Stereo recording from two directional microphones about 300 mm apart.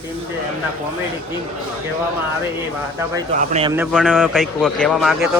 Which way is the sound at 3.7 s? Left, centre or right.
Centre.